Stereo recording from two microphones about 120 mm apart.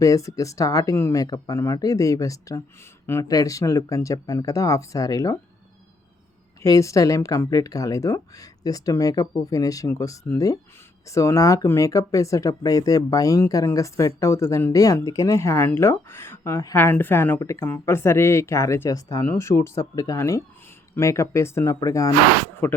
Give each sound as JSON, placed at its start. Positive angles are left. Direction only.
{"t": 0.0, "sound": "speech", "side_deg": 25}
{"t": 6.6, "sound": "speech", "side_deg": 25}